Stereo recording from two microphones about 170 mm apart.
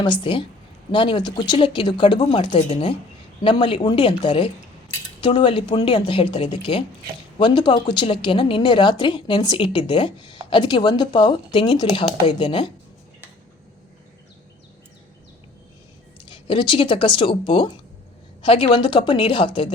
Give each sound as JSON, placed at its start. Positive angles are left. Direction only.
{"t": 0.0, "sound": "a woman's voice", "side_deg": 30}
{"t": 16.2, "sound": "a woman's voice", "side_deg": 30}